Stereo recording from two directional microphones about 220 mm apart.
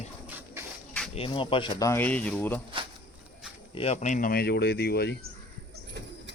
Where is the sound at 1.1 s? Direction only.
25° left (ahead or behind).